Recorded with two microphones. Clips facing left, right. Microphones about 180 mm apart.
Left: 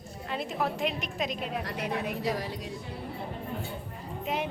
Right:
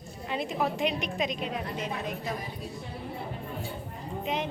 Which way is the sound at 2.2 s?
90° left.